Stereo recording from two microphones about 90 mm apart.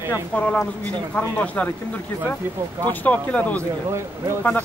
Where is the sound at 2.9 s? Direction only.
20° left (ahead or behind).